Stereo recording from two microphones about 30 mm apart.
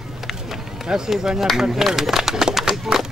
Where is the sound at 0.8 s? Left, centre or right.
Right.